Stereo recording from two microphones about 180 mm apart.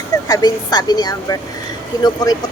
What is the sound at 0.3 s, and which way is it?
A woman's voice, 20° left (ahead or behind).